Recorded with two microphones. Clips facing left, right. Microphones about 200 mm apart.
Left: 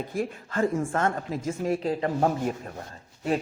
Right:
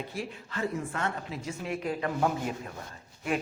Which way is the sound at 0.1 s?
50° left (ahead or behind).